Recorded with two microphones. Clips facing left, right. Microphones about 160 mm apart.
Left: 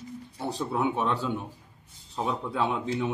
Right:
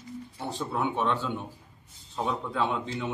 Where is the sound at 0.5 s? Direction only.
5° left (ahead or behind).